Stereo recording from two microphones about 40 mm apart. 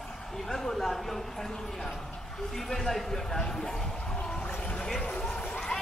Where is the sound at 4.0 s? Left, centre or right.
Left.